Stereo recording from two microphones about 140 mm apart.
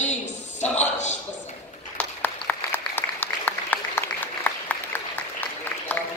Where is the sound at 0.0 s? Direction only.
55° left (ahead or behind).